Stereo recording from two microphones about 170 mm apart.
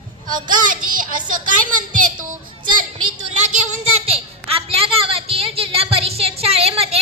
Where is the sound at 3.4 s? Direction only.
35° right (ahead or behind).